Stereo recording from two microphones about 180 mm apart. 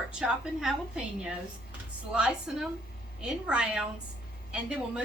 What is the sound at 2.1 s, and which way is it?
A woman's voice, 5° right (ahead or behind).